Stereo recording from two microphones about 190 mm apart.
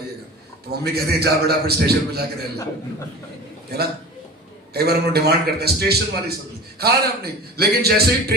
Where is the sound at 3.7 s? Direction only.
55° right (ahead or behind).